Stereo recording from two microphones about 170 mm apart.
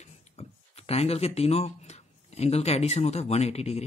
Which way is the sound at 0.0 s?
40° left (ahead or behind).